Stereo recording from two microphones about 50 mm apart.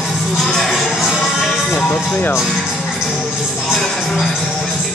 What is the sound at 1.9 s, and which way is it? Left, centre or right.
Music, centre.